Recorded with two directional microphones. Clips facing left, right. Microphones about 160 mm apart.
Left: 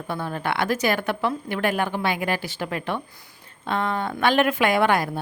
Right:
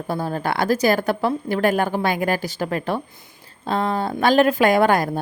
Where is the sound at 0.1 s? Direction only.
35° right (ahead or behind).